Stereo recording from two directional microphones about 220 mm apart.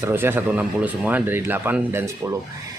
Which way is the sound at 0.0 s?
10° right (ahead or behind).